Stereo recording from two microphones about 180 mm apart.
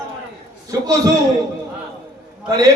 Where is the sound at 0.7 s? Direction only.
20° right (ahead or behind).